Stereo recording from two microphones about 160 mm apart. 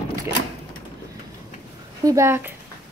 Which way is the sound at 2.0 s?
20° right (ahead or behind).